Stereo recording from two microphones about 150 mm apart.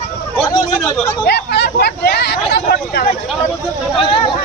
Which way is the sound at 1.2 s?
90° left.